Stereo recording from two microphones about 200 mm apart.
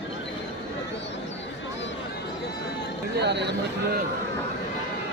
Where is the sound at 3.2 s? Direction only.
55° right (ahead or behind).